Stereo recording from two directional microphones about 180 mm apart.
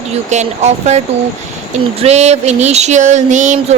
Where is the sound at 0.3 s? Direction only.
40° right (ahead or behind).